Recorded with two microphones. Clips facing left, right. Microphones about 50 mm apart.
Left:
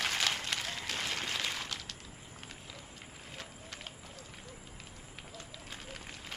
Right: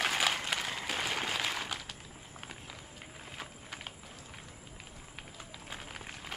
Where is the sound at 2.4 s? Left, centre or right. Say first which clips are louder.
Right 3 dB; centre.